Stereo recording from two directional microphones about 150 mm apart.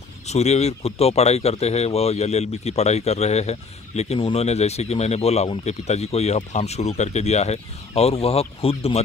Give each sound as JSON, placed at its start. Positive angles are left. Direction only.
{"t": 0.3, "sound": "speech", "side_deg": 45}